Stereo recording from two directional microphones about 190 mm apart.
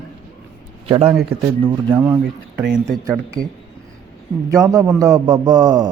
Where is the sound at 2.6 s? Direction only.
5° right (ahead or behind).